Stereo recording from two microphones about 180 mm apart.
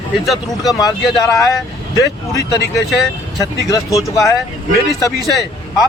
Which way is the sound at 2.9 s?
Centre (ahead or behind).